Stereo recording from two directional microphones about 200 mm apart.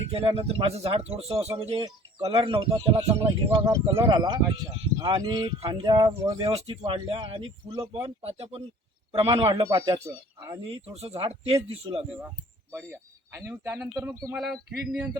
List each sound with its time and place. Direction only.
0.1 s speech: 30° right (ahead or behind)
8.0 s speech: 30° right (ahead or behind)
10.8 s speech: 30° right (ahead or behind)
12.7 s speech: 10° right (ahead or behind)
14.3 s speech: centre (ahead or behind)